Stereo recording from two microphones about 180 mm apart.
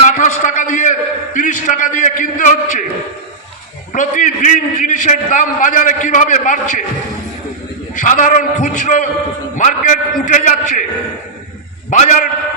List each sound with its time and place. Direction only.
0.2 s a sound: 45° left (ahead or behind)
3.9 s a man's voice: 45° left (ahead or behind)
7.9 s a man's voice: 45° left (ahead or behind)
11.9 s a man's voice: 45° left (ahead or behind)